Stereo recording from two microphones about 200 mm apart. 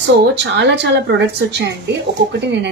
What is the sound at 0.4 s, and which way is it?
Speech, 60° right (ahead or behind).